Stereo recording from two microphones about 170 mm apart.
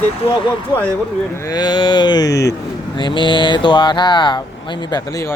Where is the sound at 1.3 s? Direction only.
20° left (ahead or behind).